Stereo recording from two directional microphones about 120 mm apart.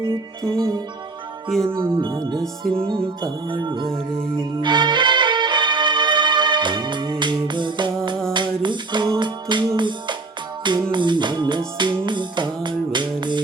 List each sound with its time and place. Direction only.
0.0 s music: 40° right (ahead or behind)